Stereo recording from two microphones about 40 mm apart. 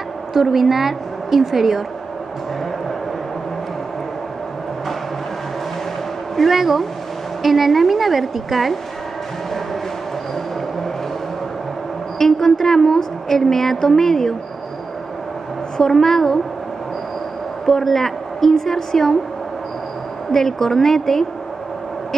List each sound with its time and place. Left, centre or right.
0.3 s a woman's voice: centre
6.3 s a woman's voice: centre
12.2 s a woman's voice: centre
15.8 s a woman's voice: centre
17.6 s a woman's voice: centre
20.2 s a woman's voice: centre